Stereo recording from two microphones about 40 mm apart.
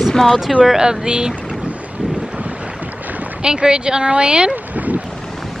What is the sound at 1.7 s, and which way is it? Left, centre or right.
Boat, right.